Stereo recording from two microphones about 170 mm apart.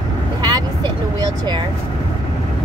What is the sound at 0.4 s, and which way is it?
Vehicle, 25° right (ahead or behind).